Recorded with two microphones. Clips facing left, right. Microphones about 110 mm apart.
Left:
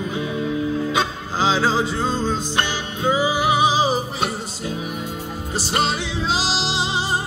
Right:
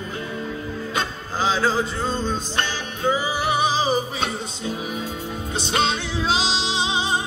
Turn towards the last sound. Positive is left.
turn(degrees=5)  # may be behind; listen again after turning